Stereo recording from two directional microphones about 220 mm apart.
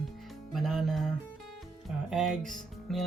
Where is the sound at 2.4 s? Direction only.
35° right (ahead or behind).